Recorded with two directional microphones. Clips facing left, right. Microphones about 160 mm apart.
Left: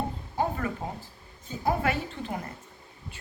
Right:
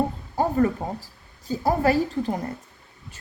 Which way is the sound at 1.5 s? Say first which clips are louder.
Right 6 dB; 35° right (ahead or behind).